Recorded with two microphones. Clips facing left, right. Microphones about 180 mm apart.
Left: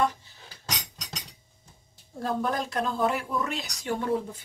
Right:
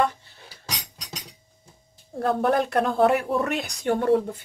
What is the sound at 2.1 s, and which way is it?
Speech, 60° right (ahead or behind).